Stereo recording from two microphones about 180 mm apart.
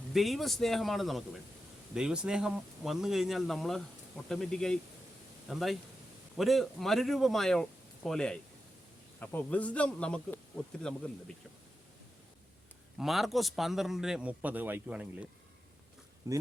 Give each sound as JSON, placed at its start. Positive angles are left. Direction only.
{"t": 0.1, "sound": "a man's voice", "side_deg": 0}
{"t": 13.0, "sound": "a man's voice", "side_deg": 0}
{"t": 16.2, "sound": "speech", "side_deg": -15}